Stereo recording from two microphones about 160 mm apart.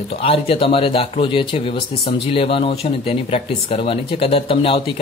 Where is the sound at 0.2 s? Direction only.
35° left (ahead or behind).